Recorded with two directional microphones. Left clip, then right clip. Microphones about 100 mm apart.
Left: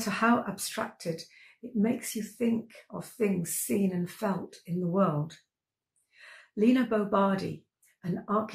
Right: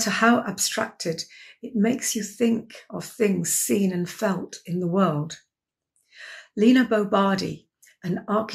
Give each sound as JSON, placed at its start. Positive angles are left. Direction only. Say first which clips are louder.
{"t": 0.0, "sound": "speech", "louder": "right 7 dB", "side_deg": -20}